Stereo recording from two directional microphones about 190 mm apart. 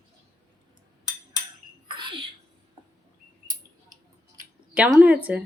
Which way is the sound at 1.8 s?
25° right (ahead or behind).